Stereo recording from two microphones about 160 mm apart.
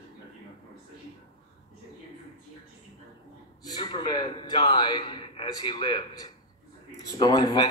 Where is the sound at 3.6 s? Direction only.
25° left (ahead or behind).